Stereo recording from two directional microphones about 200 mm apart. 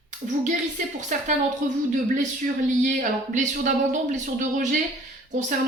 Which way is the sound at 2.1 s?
40° right (ahead or behind).